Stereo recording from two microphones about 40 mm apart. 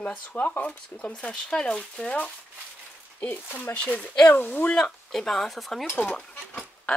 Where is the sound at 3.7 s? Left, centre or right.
Left.